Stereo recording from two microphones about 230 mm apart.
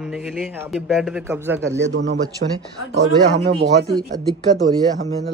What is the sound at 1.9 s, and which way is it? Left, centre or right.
Speech, right.